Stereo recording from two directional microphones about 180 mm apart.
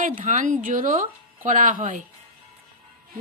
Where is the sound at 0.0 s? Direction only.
50° right (ahead or behind).